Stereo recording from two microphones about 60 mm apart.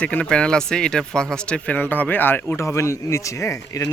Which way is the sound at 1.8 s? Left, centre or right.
Left.